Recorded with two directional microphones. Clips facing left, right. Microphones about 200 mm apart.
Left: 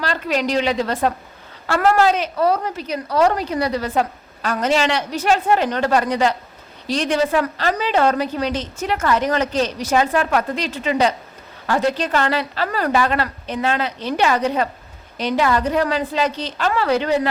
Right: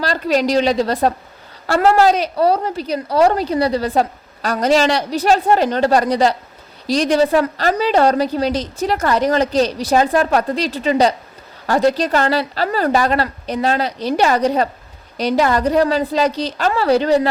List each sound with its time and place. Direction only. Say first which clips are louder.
0.0 s a woman's voice: right 4 dB; 35° right (ahead or behind)